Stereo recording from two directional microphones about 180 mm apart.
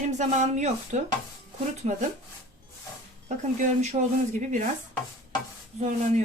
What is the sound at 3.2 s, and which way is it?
Speech, 40° right (ahead or behind).